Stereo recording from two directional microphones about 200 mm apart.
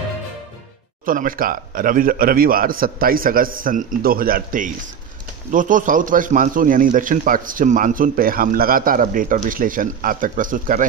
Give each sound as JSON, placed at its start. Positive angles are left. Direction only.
{"t": 1.0, "sound": "a man's voice", "side_deg": -45}